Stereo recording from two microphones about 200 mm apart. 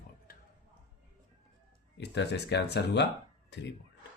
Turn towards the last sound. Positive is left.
turn(degrees=60)  # may be behind; listen again after turning